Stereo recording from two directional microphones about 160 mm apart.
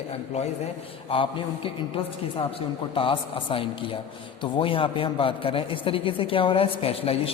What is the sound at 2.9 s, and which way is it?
A man's voice, 35° left (ahead or behind).